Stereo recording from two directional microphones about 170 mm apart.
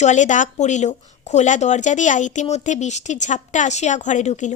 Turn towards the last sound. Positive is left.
turn(degrees=45)  # may be behind; listen again after turning